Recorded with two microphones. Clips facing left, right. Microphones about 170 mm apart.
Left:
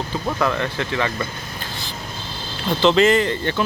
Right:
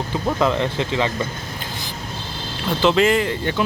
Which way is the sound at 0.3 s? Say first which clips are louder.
Right 3 dB; 20° right (ahead or behind).